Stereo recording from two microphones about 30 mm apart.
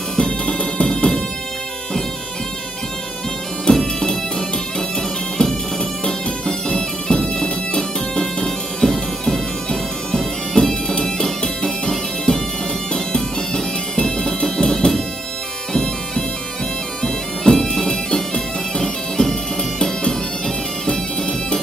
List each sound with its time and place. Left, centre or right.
0.5 s music: left
3.7 s bagpipes: left
5.4 s music: left
8.2 s music: centre
9.7 s bagpipes: left
10.6 s music: centre
15.7 s bagpipes: centre